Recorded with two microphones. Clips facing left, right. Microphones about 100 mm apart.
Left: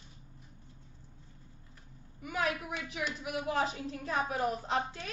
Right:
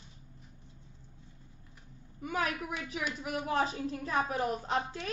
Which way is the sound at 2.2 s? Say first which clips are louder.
Even; 40° right (ahead or behind).